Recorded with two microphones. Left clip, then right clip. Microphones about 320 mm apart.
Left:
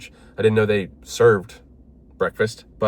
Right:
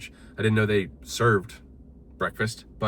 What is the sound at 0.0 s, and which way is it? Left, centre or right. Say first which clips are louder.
Speech: left 8 dB; centre.